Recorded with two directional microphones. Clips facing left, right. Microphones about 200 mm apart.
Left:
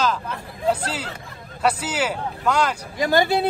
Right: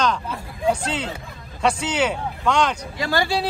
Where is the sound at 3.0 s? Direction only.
20° left (ahead or behind).